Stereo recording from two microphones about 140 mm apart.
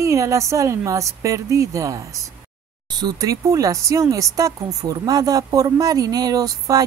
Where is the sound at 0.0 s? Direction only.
20° right (ahead or behind).